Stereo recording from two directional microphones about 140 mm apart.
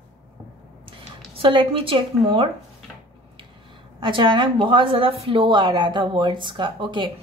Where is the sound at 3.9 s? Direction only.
35° right (ahead or behind).